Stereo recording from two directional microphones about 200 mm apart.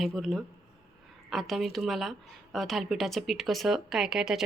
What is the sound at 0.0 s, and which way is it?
A woman's voice, centre (ahead or behind).